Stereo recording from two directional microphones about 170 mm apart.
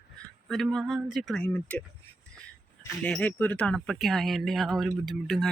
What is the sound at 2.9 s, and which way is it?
Speech, 5° left (ahead or behind).